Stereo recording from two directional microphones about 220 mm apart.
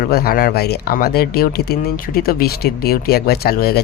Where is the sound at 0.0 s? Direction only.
45° left (ahead or behind).